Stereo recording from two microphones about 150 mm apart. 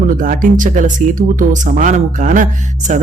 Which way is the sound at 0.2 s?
60° right (ahead or behind).